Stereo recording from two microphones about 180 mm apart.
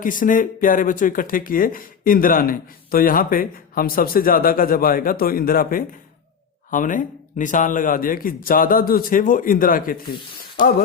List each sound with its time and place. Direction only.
0.0 s speech: 50° left (ahead or behind)